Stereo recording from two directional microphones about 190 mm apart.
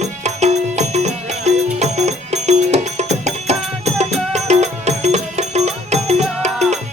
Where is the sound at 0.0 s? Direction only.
35° right (ahead or behind).